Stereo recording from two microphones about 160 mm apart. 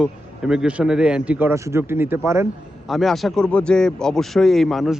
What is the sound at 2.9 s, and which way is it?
Speech, centre (ahead or behind).